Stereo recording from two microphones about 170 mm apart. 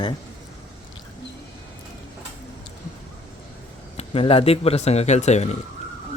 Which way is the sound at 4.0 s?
35° left (ahead or behind).